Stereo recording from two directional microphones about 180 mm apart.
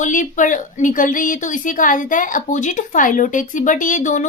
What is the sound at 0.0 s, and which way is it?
A woman's voice, 45° left (ahead or behind).